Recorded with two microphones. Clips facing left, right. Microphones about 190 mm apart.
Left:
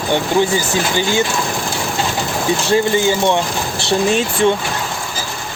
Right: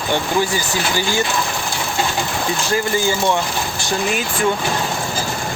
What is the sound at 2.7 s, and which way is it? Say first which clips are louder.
Speech: left 5 dB; 25° left (ahead or behind).